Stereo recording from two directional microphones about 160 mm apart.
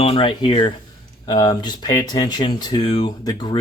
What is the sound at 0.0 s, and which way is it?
Speech, 35° left (ahead or behind).